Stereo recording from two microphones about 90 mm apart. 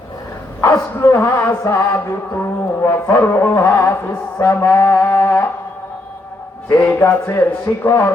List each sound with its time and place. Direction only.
0.6 s music: 30° left (ahead or behind)
6.7 s music: 20° left (ahead or behind)